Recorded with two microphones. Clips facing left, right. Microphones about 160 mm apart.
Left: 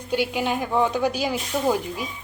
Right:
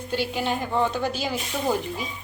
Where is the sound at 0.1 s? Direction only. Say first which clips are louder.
Left 3 dB; 10° left (ahead or behind).